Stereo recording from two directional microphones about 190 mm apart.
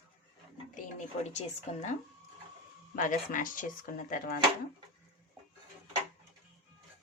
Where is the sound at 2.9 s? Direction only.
45° left (ahead or behind).